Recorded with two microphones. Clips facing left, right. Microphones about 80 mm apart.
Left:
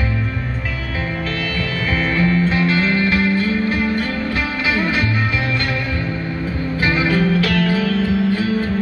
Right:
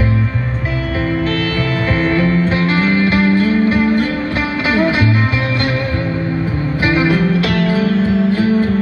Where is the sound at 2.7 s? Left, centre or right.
Right.